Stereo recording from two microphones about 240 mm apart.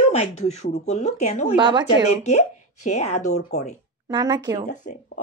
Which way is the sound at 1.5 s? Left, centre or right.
Centre.